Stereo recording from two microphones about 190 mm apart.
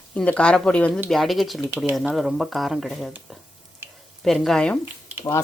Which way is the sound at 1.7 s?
10° right (ahead or behind).